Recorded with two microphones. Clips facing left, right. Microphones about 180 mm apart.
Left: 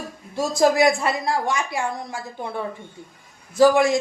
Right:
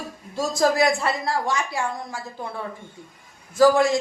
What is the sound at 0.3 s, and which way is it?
A man's voice, 15° left (ahead or behind).